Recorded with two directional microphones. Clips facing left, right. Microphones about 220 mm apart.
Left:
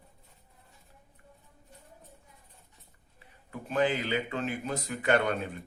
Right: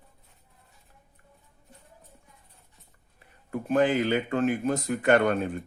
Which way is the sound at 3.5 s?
45° right (ahead or behind).